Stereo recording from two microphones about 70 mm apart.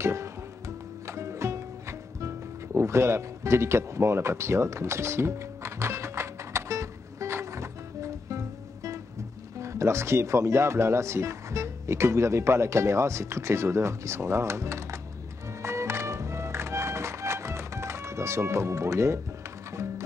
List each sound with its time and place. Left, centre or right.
0.0 s music: right
9.6 s speech: right
15.6 s music: right